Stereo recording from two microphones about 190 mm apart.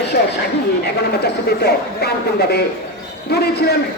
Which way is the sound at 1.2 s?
55° left (ahead or behind).